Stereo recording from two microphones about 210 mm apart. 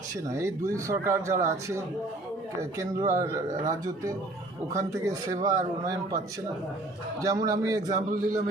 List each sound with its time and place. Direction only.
0.3 s speech: 15° right (ahead or behind)